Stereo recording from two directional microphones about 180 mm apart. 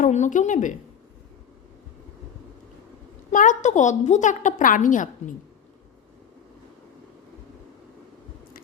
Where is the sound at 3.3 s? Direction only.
45° left (ahead or behind).